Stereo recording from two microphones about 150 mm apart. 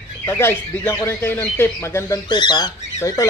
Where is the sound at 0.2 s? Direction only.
15° left (ahead or behind).